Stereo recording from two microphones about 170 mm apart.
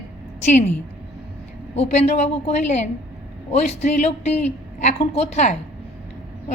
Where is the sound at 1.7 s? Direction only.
40° left (ahead or behind).